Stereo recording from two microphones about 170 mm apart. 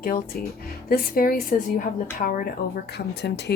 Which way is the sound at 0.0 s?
60° left (ahead or behind).